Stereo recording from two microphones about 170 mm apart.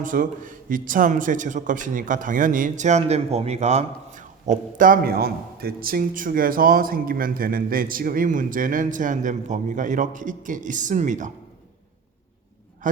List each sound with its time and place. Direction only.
0.0 s speech: 50° right (ahead or behind)
12.8 s speech: 50° right (ahead or behind)